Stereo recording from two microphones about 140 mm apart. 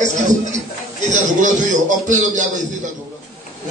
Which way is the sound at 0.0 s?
60° right (ahead or behind).